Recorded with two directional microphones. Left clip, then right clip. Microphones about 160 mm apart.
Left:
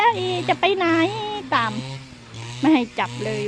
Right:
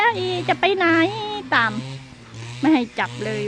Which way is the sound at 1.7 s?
40° left (ahead or behind).